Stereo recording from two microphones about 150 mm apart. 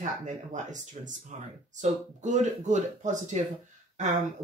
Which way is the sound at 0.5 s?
55° right (ahead or behind).